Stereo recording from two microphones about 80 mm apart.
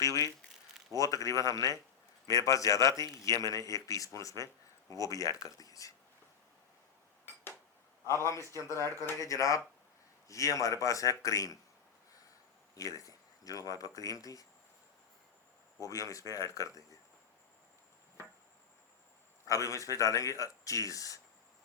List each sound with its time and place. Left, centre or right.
0.9 s speech: left
8.0 s speech: left
12.7 s speech: left
15.8 s speech: left
19.5 s speech: left